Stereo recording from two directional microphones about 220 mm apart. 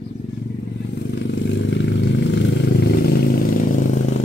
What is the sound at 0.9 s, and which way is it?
Vehicle, 50° left (ahead or behind).